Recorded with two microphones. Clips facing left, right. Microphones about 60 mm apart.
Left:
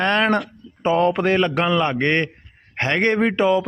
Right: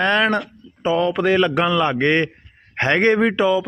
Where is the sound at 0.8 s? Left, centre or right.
Left.